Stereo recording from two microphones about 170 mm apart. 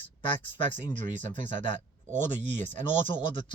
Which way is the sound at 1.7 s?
45° right (ahead or behind).